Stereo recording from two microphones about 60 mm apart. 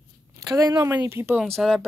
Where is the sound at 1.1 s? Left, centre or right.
Right.